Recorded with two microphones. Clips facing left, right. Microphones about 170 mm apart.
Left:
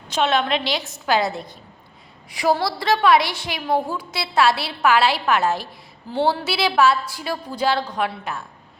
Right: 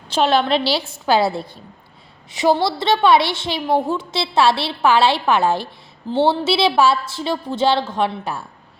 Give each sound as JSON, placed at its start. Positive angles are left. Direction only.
{"t": 0.1, "sound": "a woman's voice", "side_deg": -35}